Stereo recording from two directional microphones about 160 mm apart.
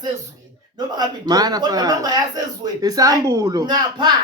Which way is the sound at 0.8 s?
25° right (ahead or behind).